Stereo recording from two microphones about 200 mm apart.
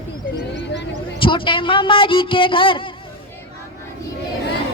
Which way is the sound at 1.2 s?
25° left (ahead or behind).